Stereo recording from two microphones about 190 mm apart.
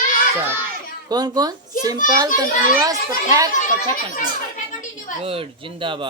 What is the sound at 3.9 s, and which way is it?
Speech, 45° left (ahead or behind).